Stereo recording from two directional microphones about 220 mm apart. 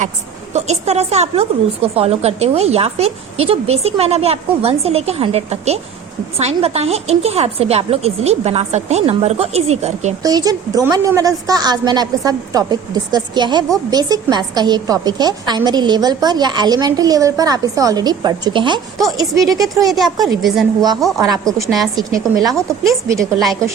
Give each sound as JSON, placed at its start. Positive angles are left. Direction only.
{"t": 0.5, "sound": "a woman's voice", "side_deg": -30}
{"t": 10.2, "sound": "a woman's voice", "side_deg": -15}
{"t": 19.8, "sound": "a woman's voice", "side_deg": 0}
{"t": 21.2, "sound": "a woman's voice", "side_deg": -15}
{"t": 21.6, "sound": "a woman's voice", "side_deg": 0}
{"t": 22.9, "sound": "a woman's voice", "side_deg": -15}